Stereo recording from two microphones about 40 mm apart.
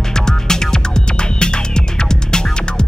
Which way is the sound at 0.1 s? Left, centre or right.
Centre.